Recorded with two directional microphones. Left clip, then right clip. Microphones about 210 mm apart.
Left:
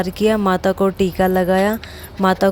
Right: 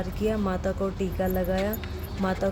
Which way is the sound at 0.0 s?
45° left (ahead or behind).